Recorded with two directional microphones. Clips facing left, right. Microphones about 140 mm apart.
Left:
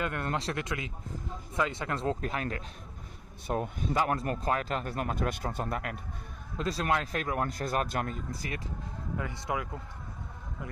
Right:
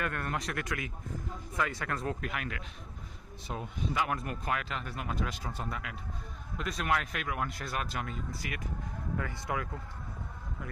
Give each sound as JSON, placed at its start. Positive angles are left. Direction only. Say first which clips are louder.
{"t": 0.0, "sound": "speech", "louder": "left 3 dB", "side_deg": 20}
{"t": 3.4, "sound": "a man's voice", "louder": "left 8 dB", "side_deg": 55}
{"t": 3.9, "sound": "a man's voice", "louder": "left 5 dB", "side_deg": 35}
{"t": 6.6, "sound": "speech", "louder": "left 3 dB", "side_deg": 30}
{"t": 9.2, "sound": "speech", "louder": "left 3 dB", "side_deg": 20}